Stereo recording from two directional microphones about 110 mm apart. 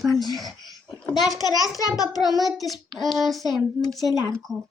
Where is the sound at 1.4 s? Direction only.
35° left (ahead or behind).